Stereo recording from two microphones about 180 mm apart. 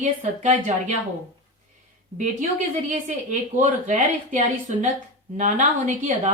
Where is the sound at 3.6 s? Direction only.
45° right (ahead or behind).